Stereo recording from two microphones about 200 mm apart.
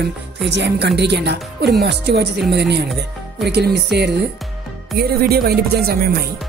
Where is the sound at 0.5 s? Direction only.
60° right (ahead or behind).